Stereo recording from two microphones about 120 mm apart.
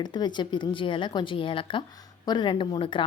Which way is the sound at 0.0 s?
35° left (ahead or behind).